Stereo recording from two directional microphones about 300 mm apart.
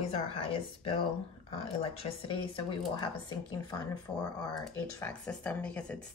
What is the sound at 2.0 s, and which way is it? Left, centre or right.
Speech, centre.